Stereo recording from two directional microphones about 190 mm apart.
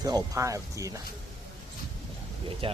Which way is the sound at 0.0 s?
20° right (ahead or behind).